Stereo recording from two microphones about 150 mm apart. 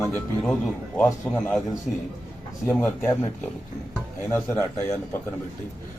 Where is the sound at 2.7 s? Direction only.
15° left (ahead or behind).